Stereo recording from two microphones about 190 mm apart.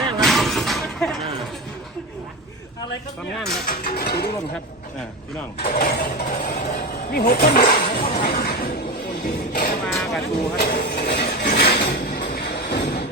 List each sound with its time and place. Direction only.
0.0 s vehicle: centre (ahead or behind)
3.7 s speech: 50° left (ahead or behind)
5.5 s speech: 50° left (ahead or behind)
9.2 s music: 50° left (ahead or behind)
9.8 s vehicle: 5° left (ahead or behind)
10.6 s a sound: 55° left (ahead or behind)